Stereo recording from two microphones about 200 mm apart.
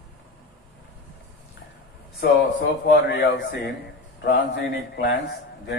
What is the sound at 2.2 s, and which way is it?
A man's voice, 55° left (ahead or behind).